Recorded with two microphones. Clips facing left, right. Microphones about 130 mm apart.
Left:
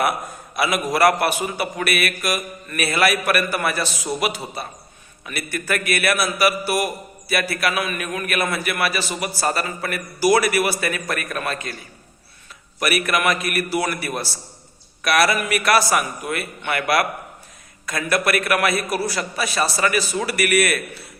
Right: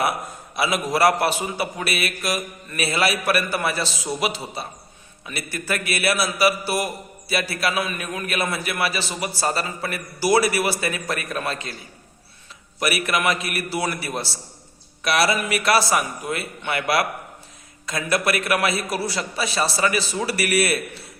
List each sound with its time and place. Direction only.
0.5 s a man's voice: 25° right (ahead or behind)
5.5 s a man's voice: 30° right (ahead or behind)
13.0 s a man's voice: 25° right (ahead or behind)